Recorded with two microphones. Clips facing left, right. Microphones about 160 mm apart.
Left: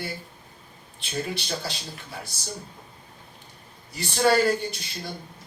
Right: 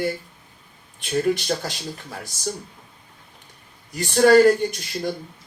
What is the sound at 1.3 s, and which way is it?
Speech, 45° right (ahead or behind).